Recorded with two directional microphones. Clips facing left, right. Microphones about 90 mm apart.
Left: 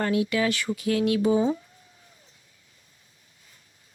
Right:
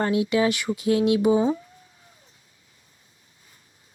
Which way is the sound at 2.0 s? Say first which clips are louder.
Right 1 dB; 30° right (ahead or behind).